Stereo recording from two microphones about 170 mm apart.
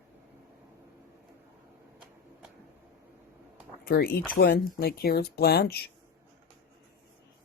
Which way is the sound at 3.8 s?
65° left (ahead or behind).